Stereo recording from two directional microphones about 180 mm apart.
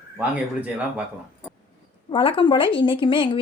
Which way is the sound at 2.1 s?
25° left (ahead or behind).